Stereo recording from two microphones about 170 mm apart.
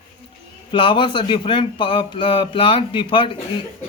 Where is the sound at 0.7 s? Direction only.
30° left (ahead or behind).